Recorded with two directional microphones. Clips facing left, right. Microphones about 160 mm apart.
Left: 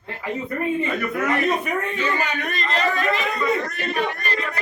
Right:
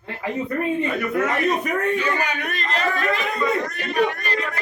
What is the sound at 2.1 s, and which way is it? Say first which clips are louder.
Speech: even; 10° right (ahead or behind).